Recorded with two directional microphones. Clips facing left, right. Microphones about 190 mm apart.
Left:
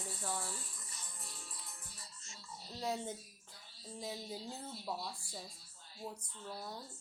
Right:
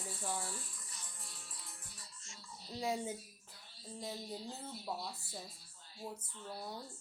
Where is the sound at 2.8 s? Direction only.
10° right (ahead or behind).